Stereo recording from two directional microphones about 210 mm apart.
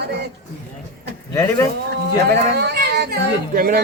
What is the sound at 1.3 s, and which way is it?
Speech, 15° left (ahead or behind).